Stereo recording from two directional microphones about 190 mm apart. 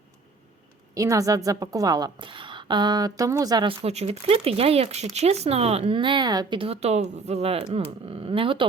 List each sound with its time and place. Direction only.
0.9 s a woman's voice: 15° right (ahead or behind)